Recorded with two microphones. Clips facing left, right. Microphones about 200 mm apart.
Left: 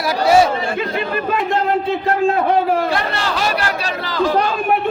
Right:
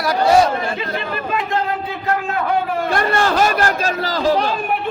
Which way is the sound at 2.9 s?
50° right (ahead or behind).